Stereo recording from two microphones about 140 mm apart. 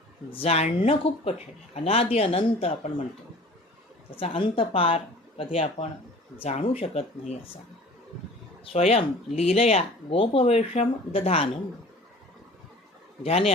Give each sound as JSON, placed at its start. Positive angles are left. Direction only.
{"t": 0.3, "sound": "speech", "side_deg": 45}
{"t": 4.2, "sound": "a woman's voice", "side_deg": 40}
{"t": 5.5, "sound": "speech", "side_deg": 55}
{"t": 6.3, "sound": "speech", "side_deg": 40}
{"t": 8.6, "sound": "speech", "side_deg": 45}
{"t": 13.2, "sound": "speech", "side_deg": 45}